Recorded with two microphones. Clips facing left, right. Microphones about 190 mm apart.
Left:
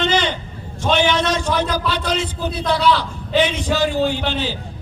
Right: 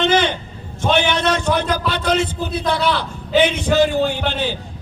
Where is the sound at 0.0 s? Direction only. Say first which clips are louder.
Right 3 dB; 55° right (ahead or behind).